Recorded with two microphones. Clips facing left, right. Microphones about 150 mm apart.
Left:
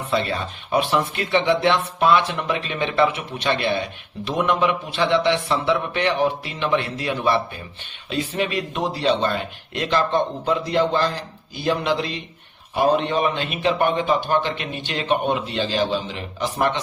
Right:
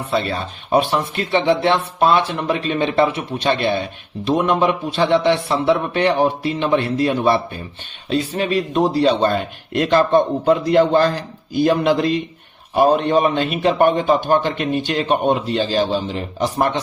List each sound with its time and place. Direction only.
0.1 s a man's voice: 35° right (ahead or behind)